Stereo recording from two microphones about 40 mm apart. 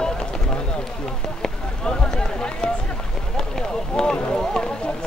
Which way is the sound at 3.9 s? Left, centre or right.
Centre.